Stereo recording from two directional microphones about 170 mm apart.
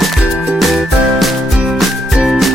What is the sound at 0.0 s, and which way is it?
Music, centre (ahead or behind).